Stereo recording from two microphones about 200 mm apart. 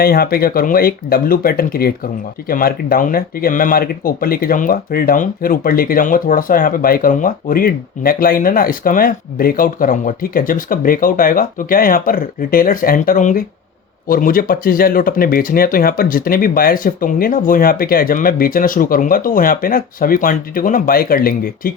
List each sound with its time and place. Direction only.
0.0 s speech: 50° left (ahead or behind)